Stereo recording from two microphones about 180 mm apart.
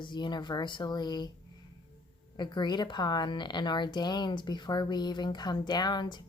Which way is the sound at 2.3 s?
25° left (ahead or behind).